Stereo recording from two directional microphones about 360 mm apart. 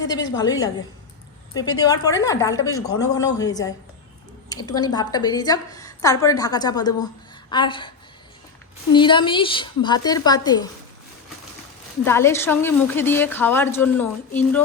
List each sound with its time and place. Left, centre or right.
0.0 s a woman's voice: left
0.3 s a woman's voice: centre
1.8 s a woman's voice: centre
12.0 s a woman's voice: centre